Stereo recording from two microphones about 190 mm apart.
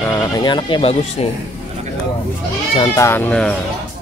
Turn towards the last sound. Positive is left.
turn(degrees=5)  # may be behind; listen again after turning